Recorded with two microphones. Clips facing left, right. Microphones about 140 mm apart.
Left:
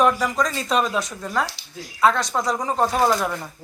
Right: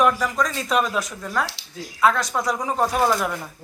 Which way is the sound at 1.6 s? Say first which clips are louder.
Even; 90° right.